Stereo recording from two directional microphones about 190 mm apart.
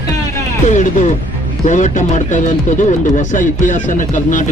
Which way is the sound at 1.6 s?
40° left (ahead or behind).